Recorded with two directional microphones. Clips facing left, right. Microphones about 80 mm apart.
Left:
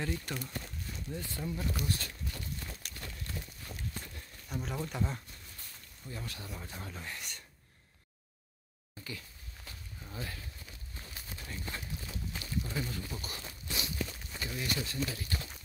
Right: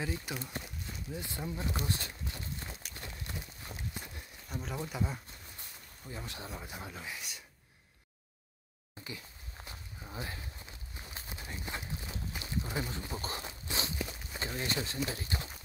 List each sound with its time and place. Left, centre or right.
0.0 s speech: centre
0.4 s walk: centre
1.2 s speech: centre
2.9 s horse: right
4.5 s speech: centre
5.6 s speech: right; by 7.4 s centre
9.0 s a sound: right
9.7 s walk: right
13.9 s walk: centre
14.4 s speech: right